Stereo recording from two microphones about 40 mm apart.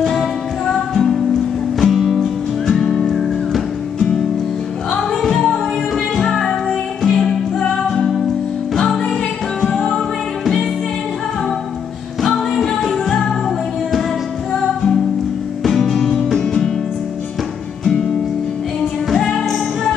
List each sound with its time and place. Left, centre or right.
0.0 s music: centre
9.7 s music: left
12.2 s music: centre
15.6 s music: centre